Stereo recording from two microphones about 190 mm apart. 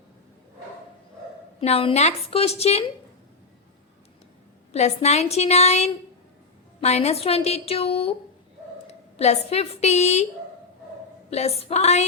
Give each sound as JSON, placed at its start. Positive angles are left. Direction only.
{"t": 1.6, "sound": "a woman's voice", "side_deg": 30}
{"t": 4.7, "sound": "a woman's voice", "side_deg": 35}
{"t": 11.3, "sound": "a woman's voice", "side_deg": 35}